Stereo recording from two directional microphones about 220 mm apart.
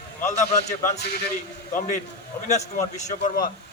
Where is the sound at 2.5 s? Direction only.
30° left (ahead or behind).